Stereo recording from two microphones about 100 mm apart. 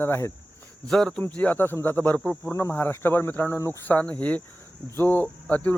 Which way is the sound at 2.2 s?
Centre (ahead or behind).